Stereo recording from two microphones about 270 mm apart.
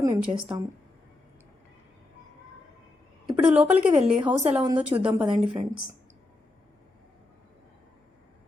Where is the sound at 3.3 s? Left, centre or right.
Centre.